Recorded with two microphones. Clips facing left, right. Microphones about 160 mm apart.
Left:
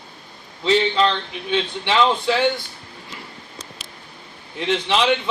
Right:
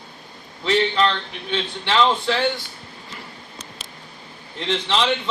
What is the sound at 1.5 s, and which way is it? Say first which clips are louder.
Speech: left 3 dB; 15° left (ahead or behind).